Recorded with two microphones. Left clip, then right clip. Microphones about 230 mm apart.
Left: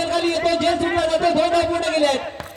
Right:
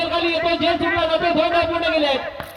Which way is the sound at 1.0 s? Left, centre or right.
Left.